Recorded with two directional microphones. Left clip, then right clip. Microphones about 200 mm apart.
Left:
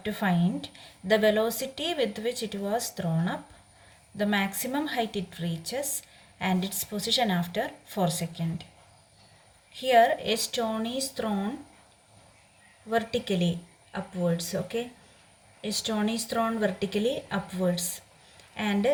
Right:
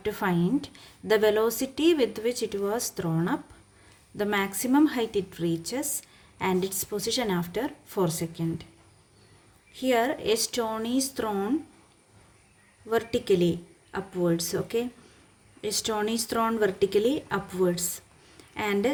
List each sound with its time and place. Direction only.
0.0 s speech: 40° right (ahead or behind)
9.7 s a woman's voice: 35° right (ahead or behind)
12.9 s a woman's voice: 45° right (ahead or behind)